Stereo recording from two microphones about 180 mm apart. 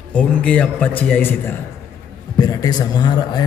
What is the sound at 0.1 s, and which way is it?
Speech, 5° left (ahead or behind).